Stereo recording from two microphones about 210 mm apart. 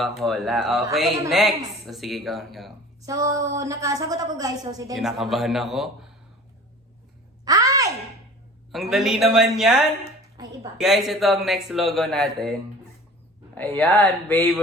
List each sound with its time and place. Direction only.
0.0 s speech: centre (ahead or behind)
3.0 s a woman's voice: 15° right (ahead or behind)
4.9 s speech: centre (ahead or behind)
7.4 s a sound: 15° right (ahead or behind)
8.7 s speech: centre (ahead or behind)
10.3 s speech: 15° right (ahead or behind)
10.8 s speech: centre (ahead or behind)
13.6 s speech: 10° left (ahead or behind)